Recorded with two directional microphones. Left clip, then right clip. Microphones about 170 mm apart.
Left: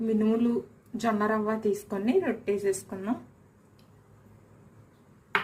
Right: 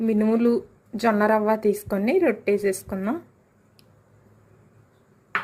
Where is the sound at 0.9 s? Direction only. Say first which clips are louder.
Right 7 dB; 55° right (ahead or behind).